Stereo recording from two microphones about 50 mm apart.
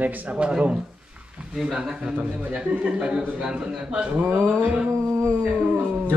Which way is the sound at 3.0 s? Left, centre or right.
Centre.